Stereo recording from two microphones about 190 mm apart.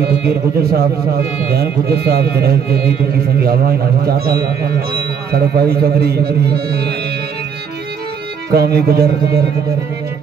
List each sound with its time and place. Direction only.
0.0 s speech: 55° right (ahead or behind)
8.5 s speech: 55° right (ahead or behind)